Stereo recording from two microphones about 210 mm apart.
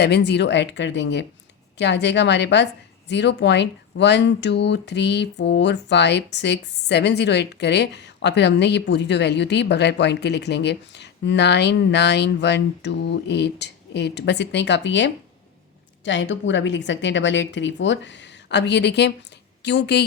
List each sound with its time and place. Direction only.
0.0 s a woman's voice: 55° left (ahead or behind)